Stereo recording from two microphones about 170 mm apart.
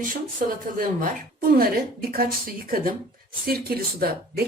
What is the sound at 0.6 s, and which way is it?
Speech, 55° right (ahead or behind).